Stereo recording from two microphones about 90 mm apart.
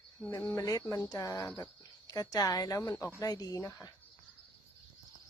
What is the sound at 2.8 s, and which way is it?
Speech, 30° left (ahead or behind).